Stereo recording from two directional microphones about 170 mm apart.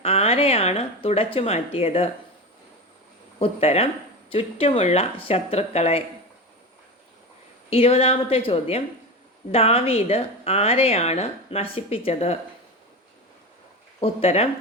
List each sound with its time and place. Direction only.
0.0 s speech: 35° left (ahead or behind)
3.3 s speech: 35° left (ahead or behind)
7.7 s speech: 35° left (ahead or behind)
14.0 s speech: 35° left (ahead or behind)